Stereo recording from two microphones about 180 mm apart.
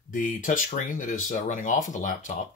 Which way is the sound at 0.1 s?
45° left (ahead or behind).